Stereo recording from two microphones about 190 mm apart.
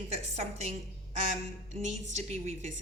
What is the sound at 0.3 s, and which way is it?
A woman's voice, 35° right (ahead or behind).